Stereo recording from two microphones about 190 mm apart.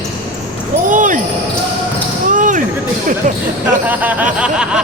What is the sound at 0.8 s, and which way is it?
Basketball bounce, 45° right (ahead or behind).